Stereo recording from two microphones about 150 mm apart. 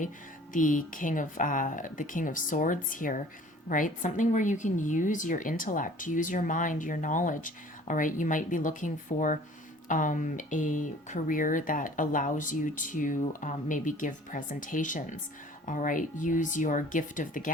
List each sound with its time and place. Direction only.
0.5 s a woman's voice: 60° left (ahead or behind)